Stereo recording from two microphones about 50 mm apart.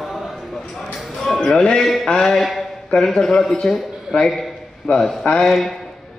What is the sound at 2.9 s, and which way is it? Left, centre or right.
Speech, centre.